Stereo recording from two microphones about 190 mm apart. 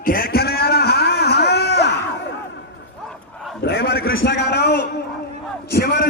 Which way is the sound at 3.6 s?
60° left (ahead or behind).